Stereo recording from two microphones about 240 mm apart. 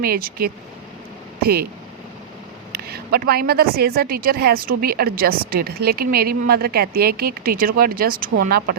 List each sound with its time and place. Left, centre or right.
0.0 s a woman's voice: right
2.7 s a woman's voice: right